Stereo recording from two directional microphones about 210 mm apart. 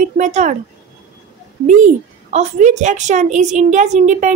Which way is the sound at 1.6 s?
35° right (ahead or behind).